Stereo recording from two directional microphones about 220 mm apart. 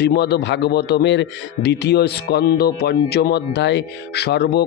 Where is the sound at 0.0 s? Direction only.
50° left (ahead or behind).